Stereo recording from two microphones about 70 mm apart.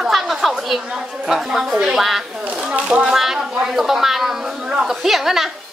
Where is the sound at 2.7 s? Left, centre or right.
Centre.